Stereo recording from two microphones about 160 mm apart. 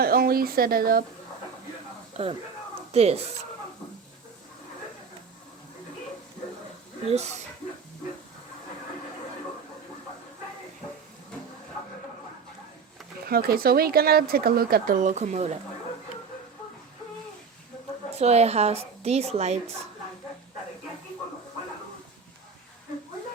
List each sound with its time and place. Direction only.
0.0 s speech: 70° right (ahead or behind)
2.2 s a woman's voice: 40° right (ahead or behind)
7.1 s speech: 45° right (ahead or behind)
13.2 s speech: 70° right (ahead or behind); by 15.5 s 45° right (ahead or behind)
18.1 s a woman's voice: 40° right (ahead or behind)